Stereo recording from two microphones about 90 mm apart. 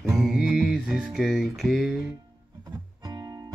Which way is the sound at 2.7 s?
45° right (ahead or behind).